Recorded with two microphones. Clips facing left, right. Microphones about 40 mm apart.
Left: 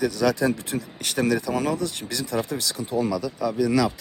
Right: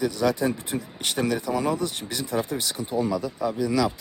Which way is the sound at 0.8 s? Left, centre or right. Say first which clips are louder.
Left 1 dB; left.